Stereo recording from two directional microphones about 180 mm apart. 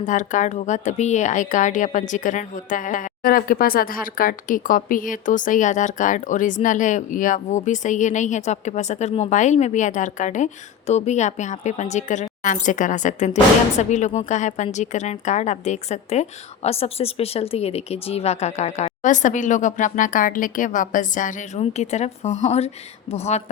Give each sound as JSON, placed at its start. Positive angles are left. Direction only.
{"t": 0.0, "sound": "a woman's voice", "side_deg": 45}